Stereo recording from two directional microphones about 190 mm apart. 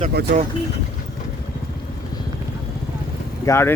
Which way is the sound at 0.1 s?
55° right (ahead or behind).